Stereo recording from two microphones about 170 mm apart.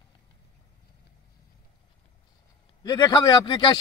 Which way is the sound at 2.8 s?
25° left (ahead or behind).